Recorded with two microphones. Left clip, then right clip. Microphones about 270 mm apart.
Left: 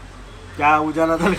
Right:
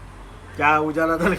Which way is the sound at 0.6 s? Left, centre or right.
Centre.